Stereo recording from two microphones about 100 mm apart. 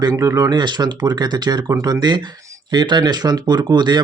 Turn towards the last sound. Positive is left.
turn(degrees=-45)  # may be behind; listen again after turning